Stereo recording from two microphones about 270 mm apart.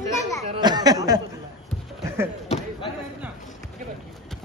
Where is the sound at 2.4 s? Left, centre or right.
Left.